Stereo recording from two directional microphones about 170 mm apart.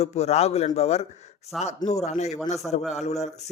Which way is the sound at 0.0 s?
40° left (ahead or behind).